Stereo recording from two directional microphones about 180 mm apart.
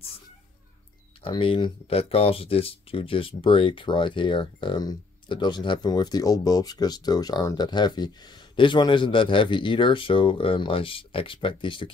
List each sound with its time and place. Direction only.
1.2 s speech: 30° left (ahead or behind)